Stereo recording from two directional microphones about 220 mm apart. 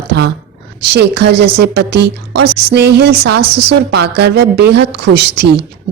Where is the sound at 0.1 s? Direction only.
50° right (ahead or behind).